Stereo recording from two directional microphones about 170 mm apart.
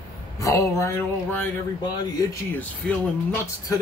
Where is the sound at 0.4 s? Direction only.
15° left (ahead or behind).